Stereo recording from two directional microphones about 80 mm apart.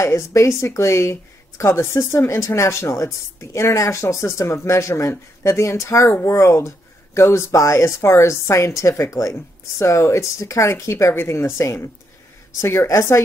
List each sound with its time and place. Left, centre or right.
0.0 s a woman's voice: left